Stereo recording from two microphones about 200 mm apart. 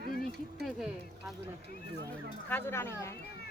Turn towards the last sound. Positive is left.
turn(degrees=10)  # may be behind; listen again after turning